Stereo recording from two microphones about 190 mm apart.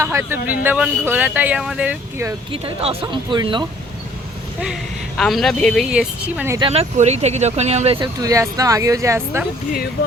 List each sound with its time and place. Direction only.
0.0 s a man's voice: 15° right (ahead or behind)
2.5 s speech: 30° right (ahead or behind)
4.6 s a woman's voice: centre (ahead or behind)
6.6 s speech: 30° right (ahead or behind)
8.0 s speech: 20° right (ahead or behind)